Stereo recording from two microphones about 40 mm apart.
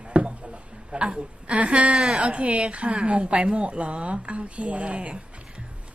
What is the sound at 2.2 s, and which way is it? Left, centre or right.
A woman's voice, right.